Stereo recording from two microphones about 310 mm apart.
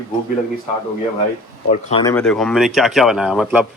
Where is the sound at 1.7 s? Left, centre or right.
Centre.